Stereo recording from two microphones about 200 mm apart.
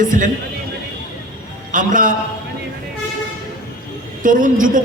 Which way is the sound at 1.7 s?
40° right (ahead or behind).